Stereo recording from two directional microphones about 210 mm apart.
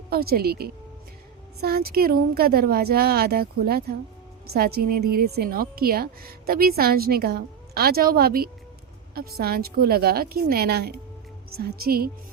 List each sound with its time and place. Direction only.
0.1 s a woman's voice: 45° right (ahead or behind)